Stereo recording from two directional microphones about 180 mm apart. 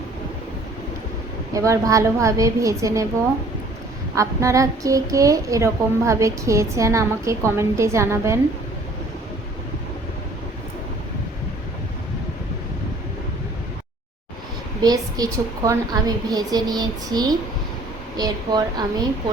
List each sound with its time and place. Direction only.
1.5 s a woman's voice: 15° right (ahead or behind)
4.1 s a woman's voice: 15° right (ahead or behind)
14.8 s a woman's voice: 20° right (ahead or behind)